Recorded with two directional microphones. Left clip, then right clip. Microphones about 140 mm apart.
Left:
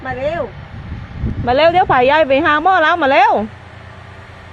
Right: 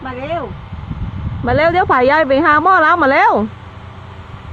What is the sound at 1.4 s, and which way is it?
A woman's voice, 10° left (ahead or behind).